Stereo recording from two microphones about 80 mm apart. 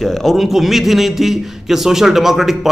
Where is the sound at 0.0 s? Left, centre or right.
Centre.